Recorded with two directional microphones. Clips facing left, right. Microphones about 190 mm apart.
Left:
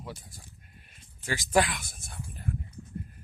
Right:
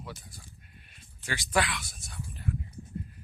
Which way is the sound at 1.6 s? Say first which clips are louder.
Left 4 dB; 45° left (ahead or behind).